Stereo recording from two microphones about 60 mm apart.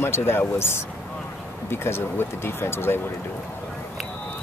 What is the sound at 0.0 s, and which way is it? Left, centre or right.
Speech, left.